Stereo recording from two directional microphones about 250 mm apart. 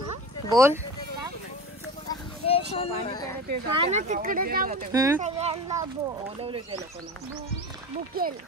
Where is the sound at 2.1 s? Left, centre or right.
Left.